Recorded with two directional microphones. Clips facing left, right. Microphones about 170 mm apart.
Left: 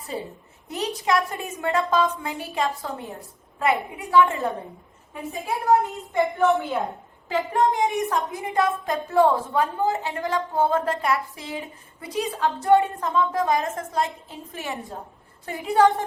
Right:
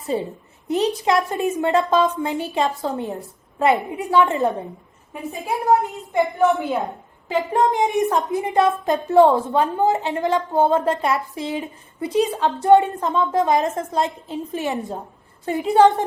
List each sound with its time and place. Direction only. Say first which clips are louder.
0.1 s a woman's voice: right 7 dB; 25° right (ahead or behind)
6.5 s a woman's voice: right 1 dB; centre (ahead or behind)
7.3 s a woman's voice: right 3 dB; 20° right (ahead or behind)